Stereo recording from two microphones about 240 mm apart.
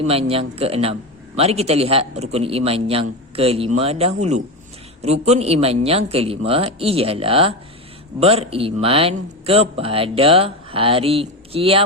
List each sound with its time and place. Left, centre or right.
0.1 s a man's voice: right